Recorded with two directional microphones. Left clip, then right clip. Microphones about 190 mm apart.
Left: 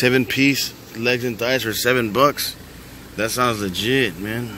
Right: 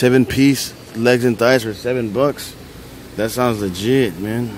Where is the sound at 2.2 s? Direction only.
15° right (ahead or behind).